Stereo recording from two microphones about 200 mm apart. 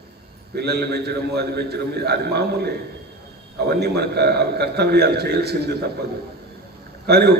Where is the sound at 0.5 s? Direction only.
55° right (ahead or behind).